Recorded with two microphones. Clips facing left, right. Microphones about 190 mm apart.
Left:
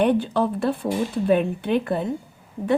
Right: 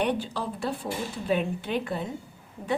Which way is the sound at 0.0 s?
55° left (ahead or behind).